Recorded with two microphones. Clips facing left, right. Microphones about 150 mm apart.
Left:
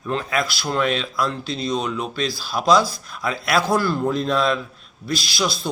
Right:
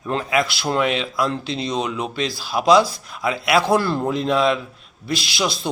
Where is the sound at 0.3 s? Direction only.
15° right (ahead or behind).